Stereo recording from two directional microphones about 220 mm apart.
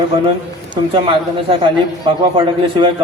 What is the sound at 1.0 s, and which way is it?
A man's voice, 25° right (ahead or behind).